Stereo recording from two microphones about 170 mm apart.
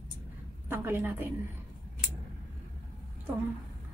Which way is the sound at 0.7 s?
15° right (ahead or behind).